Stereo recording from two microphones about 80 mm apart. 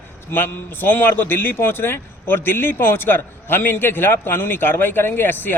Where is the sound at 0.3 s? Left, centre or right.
Left.